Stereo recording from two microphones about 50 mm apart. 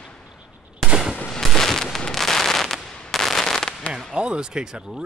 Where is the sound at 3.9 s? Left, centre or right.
Centre.